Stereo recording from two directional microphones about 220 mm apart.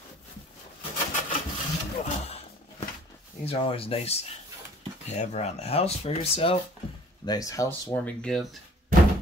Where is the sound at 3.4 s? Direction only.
25° left (ahead or behind).